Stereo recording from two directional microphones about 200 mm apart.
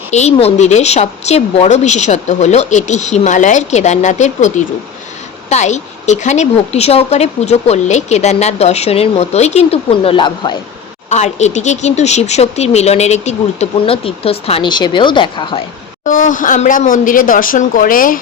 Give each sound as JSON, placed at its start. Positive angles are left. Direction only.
{"t": 0.1, "sound": "speech", "side_deg": 35}
{"t": 11.1, "sound": "speech", "side_deg": 35}
{"t": 16.0, "sound": "speech", "side_deg": 40}